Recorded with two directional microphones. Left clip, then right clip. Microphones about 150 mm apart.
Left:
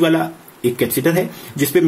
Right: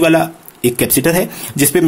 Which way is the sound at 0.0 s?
45° right (ahead or behind).